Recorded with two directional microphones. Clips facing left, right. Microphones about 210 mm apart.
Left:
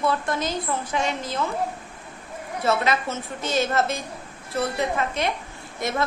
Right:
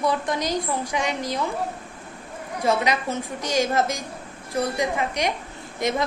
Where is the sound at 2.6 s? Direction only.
15° right (ahead or behind).